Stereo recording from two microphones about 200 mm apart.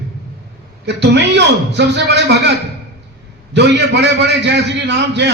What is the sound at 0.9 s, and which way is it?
A man's voice, 60° right (ahead or behind).